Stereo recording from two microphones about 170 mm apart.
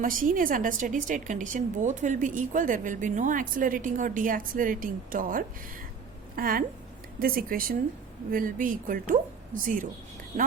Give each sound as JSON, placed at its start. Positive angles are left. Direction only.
{"t": 0.0, "sound": "a woman's voice", "side_deg": -55}